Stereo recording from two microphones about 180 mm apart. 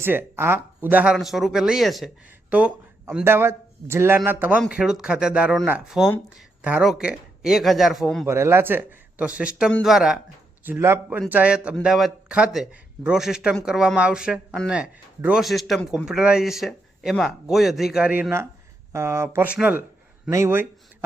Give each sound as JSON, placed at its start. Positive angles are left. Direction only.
{"t": 0.0, "sound": "speech", "side_deg": -10}
{"t": 8.3, "sound": "speech", "side_deg": -15}